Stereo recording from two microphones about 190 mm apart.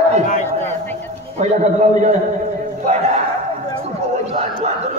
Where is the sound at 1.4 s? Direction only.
40° right (ahead or behind).